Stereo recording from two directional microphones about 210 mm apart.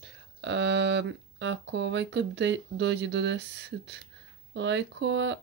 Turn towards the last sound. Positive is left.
turn(degrees=-60)  # may be behind; listen again after turning